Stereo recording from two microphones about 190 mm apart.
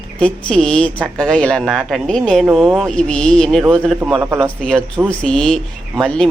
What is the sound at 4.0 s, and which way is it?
Speech, 10° right (ahead or behind).